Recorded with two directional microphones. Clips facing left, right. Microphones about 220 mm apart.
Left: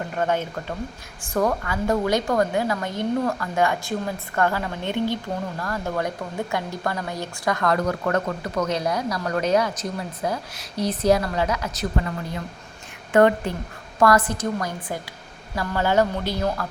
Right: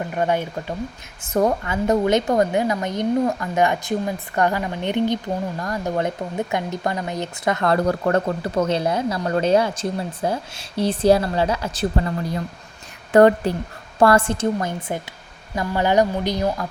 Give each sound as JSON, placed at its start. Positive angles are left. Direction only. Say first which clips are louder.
{"t": 0.2, "sound": "a woman's voice", "louder": "right 2 dB", "side_deg": -15}